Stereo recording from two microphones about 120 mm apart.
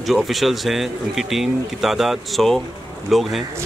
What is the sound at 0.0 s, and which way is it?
Speech, centre (ahead or behind).